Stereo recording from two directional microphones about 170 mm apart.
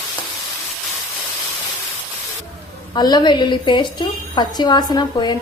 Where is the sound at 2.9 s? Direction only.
25° left (ahead or behind).